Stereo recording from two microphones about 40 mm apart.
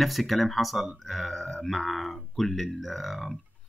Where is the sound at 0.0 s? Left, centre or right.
Centre.